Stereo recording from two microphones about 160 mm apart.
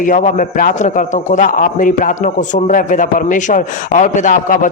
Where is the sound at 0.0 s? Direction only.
50° left (ahead or behind).